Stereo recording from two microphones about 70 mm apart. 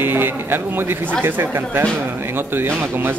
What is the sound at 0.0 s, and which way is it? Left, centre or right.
A man's voice, right.